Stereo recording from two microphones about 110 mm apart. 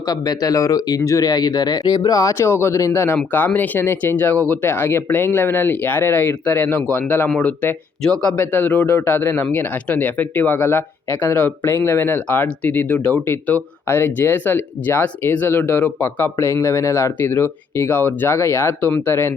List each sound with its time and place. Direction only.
0.1 s a man's voice: 35° left (ahead or behind)